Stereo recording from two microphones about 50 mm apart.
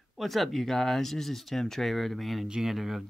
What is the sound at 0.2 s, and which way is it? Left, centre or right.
Speech, centre.